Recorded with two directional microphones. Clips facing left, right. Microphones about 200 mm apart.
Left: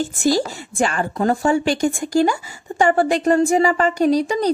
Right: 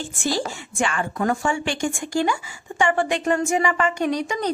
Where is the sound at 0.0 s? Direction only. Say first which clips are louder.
Left 7 dB; 40° left (ahead or behind).